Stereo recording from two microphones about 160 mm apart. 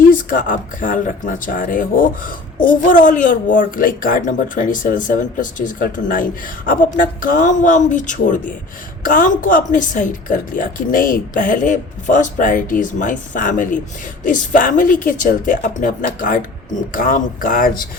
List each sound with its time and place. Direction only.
0.1 s speech: 60° left (ahead or behind)